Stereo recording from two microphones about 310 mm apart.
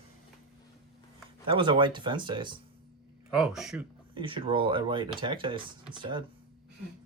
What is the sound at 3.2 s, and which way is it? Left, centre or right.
Speech, centre.